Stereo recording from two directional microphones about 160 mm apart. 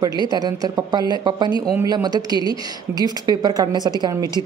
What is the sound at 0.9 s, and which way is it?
A woman's voice, 25° right (ahead or behind).